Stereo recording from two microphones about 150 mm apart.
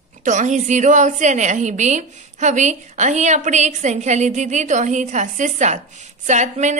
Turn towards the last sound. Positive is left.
turn(degrees=-55)  # may be behind; listen again after turning